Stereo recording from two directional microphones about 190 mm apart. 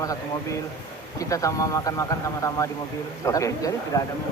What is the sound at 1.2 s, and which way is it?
A man's voice, 15° left (ahead or behind).